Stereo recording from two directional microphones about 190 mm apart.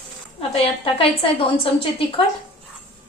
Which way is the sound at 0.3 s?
30° left (ahead or behind).